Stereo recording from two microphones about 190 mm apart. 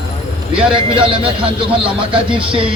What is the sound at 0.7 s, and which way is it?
Speech, 30° right (ahead or behind).